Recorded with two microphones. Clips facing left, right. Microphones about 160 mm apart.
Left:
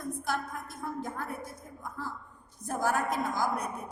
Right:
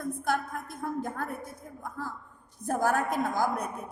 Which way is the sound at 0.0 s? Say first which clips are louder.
Right 4 dB; 55° right (ahead or behind).